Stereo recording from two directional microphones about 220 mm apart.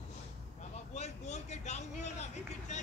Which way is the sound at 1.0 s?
30° left (ahead or behind).